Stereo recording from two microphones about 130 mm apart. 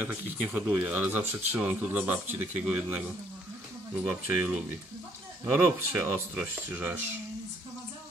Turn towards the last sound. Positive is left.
turn(degrees=-15)  # may be behind; listen again after turning